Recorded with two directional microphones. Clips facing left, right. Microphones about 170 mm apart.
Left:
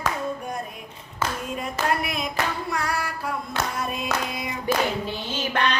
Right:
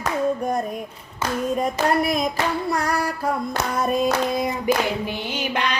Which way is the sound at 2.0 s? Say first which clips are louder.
Right 6 dB; 40° right (ahead or behind).